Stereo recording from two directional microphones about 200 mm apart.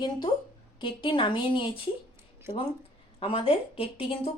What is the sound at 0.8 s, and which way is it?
A woman's voice, 25° left (ahead or behind).